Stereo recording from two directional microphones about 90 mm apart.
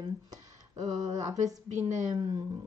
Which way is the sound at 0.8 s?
40° right (ahead or behind).